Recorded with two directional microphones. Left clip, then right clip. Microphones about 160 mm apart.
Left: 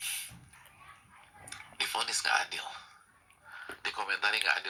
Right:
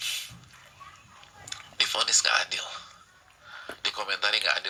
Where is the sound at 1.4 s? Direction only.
25° right (ahead or behind).